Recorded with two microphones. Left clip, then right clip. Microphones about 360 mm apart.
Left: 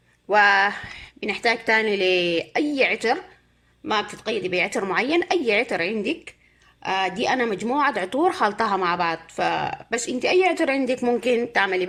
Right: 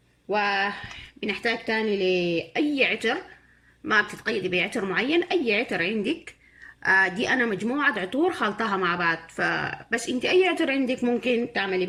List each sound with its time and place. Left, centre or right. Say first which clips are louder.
0.3 s a woman's voice: left 7 dB; centre